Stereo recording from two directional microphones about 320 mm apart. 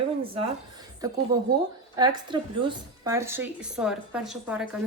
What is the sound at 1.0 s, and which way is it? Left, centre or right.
A woman's voice, centre.